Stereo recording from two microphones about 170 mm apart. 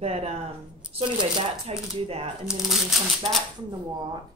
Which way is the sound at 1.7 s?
35° right (ahead or behind).